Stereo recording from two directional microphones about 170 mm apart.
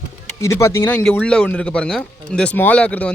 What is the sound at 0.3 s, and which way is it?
Speech, 15° left (ahead or behind).